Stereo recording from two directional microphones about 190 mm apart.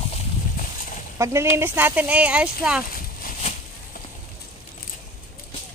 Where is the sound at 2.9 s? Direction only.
45° left (ahead or behind).